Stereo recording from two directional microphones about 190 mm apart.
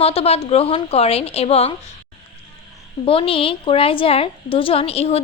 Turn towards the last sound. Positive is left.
turn(degrees=30)  # may be behind; listen again after turning